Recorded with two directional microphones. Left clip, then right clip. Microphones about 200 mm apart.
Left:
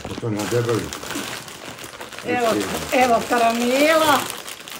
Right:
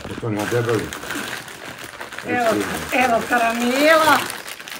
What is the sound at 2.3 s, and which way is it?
Speech, centre (ahead or behind).